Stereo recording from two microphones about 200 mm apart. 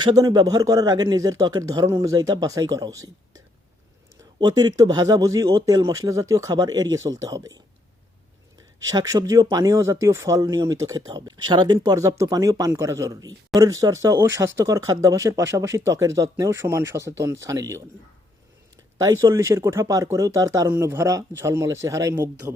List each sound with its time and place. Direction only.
0.0 s a man's voice: 20° right (ahead or behind)
8.8 s speech: 20° right (ahead or behind)
18.9 s speech: 15° right (ahead or behind)